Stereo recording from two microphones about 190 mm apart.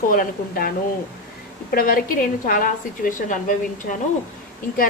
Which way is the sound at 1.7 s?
50° left (ahead or behind).